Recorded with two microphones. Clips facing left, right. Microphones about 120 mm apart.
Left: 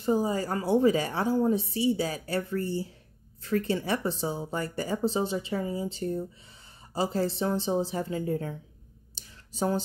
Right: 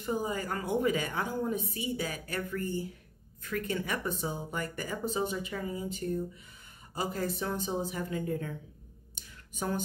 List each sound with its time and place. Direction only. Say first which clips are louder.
0.0 s a woman's voice: left 6 dB; 30° left (ahead or behind)
9.1 s clicking: left 2 dB; 30° left (ahead or behind)